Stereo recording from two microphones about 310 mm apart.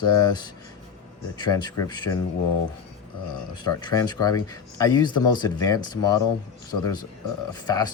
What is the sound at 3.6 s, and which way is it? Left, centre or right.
Speech, centre.